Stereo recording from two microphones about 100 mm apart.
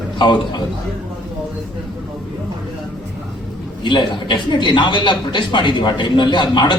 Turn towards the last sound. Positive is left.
turn(degrees=50)  # may be behind; listen again after turning